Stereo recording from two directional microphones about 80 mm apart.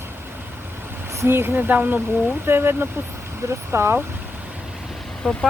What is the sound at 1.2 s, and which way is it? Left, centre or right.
Speech, right.